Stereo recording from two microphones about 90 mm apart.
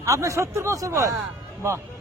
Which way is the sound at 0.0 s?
35° right (ahead or behind).